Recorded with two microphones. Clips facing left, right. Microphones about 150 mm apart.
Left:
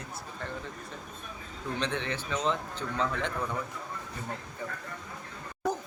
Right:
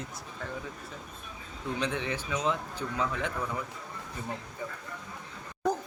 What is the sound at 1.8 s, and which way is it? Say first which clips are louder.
A man's voice: even; 10° right (ahead or behind).